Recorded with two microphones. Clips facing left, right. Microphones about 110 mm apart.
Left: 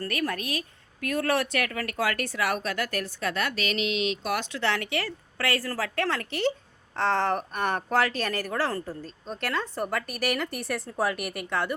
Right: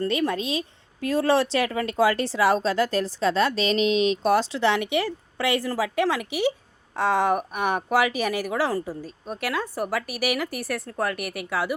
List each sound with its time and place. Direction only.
0.0 s speech: 20° right (ahead or behind); by 11.7 s 5° right (ahead or behind)